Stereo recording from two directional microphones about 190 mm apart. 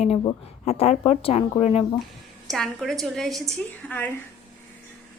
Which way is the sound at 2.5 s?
Centre (ahead or behind).